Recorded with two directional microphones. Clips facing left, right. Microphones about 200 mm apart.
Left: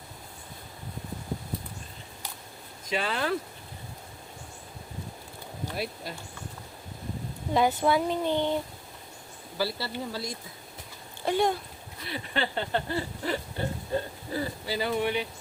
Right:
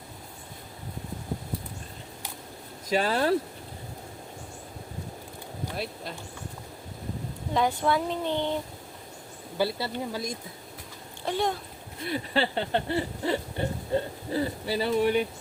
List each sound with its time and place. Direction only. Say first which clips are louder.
2.9 s speech: right 5 dB; 40° right (ahead or behind)
5.7 s speech: left 1 dB; 5° left (ahead or behind)
7.5 s speech: left 1 dB; 5° left (ahead or behind)
9.6 s a sound: right 3 dB; 20° right (ahead or behind)
11.3 s speech: left 2 dB; centre (ahead or behind)
12.0 s a sound: right 4 dB; 40° right (ahead or behind)
15.0 s speech: right 5 dB; 45° right (ahead or behind)